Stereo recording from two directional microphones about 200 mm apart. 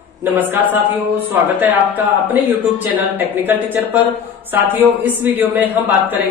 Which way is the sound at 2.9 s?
10° right (ahead or behind).